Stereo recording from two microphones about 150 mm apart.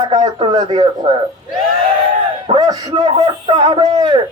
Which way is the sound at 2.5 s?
30° right (ahead or behind).